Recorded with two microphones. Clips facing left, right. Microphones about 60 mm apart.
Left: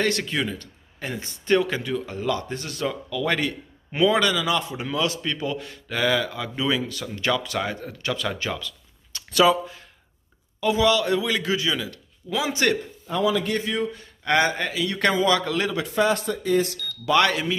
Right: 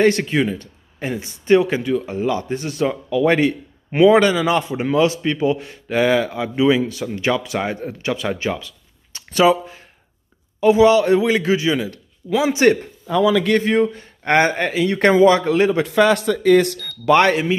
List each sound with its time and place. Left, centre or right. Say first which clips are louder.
0.0 s speech: right 8 dB; right
13.6 s a man's voice: right 9 dB; right
15.0 s speech: right 8 dB; right
15.8 s speech: right 7 dB; right
17.1 s a man's voice: right 6 dB; right